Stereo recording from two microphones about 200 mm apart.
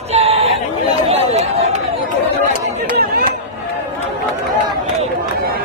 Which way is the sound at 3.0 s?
50° right (ahead or behind).